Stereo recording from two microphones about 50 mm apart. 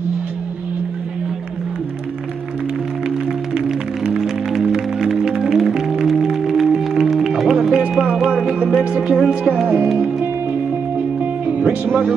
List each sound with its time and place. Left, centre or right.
3.5 s music: centre
11.1 s music: right